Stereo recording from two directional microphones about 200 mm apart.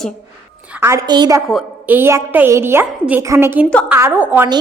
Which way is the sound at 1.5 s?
Centre (ahead or behind).